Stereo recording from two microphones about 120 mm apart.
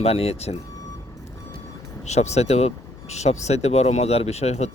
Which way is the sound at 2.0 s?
70° left (ahead or behind).